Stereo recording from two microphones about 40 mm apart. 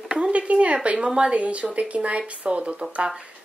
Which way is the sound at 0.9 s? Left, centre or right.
Right.